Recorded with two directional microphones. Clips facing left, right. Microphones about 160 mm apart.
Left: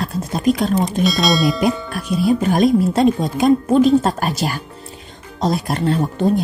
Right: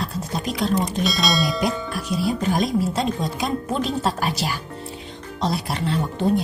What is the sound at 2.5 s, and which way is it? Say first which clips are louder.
Speech: left 7 dB; 55° left (ahead or behind).